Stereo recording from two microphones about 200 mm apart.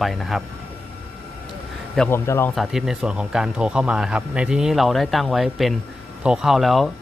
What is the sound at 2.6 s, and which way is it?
Speech, centre (ahead or behind).